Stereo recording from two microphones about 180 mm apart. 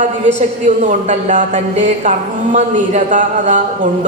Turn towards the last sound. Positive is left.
turn(degrees=-45)  # may be behind; listen again after turning